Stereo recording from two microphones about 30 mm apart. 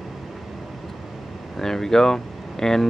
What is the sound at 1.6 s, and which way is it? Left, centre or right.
Speech, centre.